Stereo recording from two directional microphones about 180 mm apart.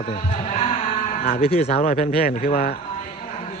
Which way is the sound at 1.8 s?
50° left (ahead or behind).